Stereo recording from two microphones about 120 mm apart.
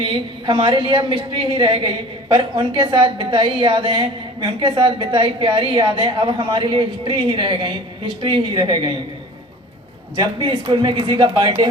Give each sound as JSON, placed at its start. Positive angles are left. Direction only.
{"t": 0.0, "sound": "a woman's voice", "side_deg": -45}
{"t": 10.2, "sound": "a woman's voice", "side_deg": -40}